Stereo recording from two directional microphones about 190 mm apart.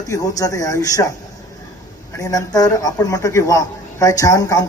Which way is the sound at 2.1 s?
20° left (ahead or behind).